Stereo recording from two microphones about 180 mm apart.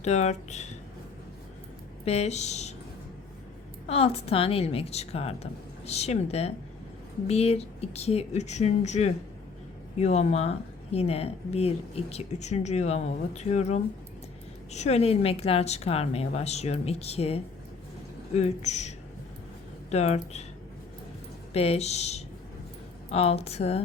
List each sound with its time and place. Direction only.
0.0 s a woman's voice: 40° left (ahead or behind)
2.0 s a woman's voice: 35° left (ahead or behind)
3.8 s a woman's voice: 35° left (ahead or behind)
21.5 s a woman's voice: 35° left (ahead or behind)